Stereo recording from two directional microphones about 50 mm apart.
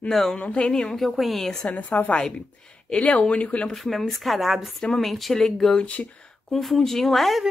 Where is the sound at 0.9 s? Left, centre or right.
Centre.